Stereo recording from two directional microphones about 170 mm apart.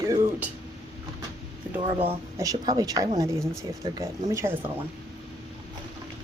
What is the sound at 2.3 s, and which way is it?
Speech, 20° right (ahead or behind).